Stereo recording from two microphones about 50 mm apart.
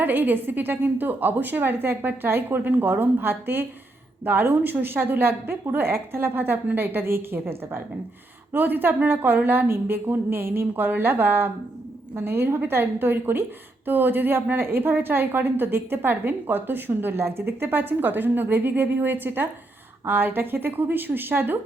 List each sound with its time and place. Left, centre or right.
0.0 s a woman's voice: right